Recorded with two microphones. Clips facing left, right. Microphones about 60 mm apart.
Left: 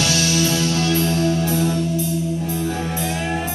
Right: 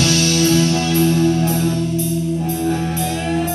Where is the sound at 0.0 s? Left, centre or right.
Centre.